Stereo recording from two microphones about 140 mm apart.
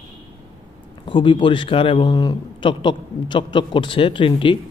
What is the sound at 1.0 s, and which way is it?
Speech, 35° left (ahead or behind).